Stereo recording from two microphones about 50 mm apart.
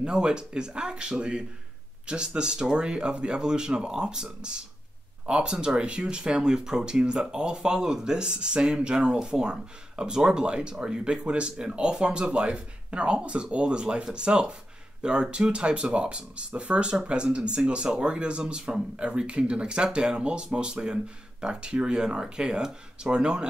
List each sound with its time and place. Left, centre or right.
0.0 s speech: centre